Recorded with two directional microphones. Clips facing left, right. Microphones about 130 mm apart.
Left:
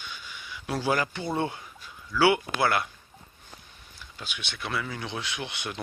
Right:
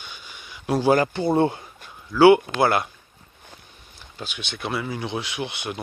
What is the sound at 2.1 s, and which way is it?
Speech, 50° right (ahead or behind).